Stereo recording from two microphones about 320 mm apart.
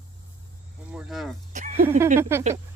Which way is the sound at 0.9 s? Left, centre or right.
Centre.